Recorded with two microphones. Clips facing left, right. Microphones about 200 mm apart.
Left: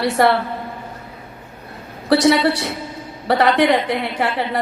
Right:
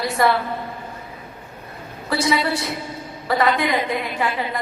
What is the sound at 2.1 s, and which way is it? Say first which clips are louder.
A woman's voice: left 7 dB; 75° left (ahead or behind).